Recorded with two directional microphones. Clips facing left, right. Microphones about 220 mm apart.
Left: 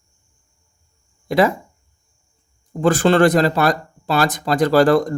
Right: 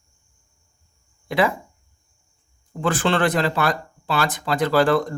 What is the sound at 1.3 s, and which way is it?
Speech, 40° left (ahead or behind).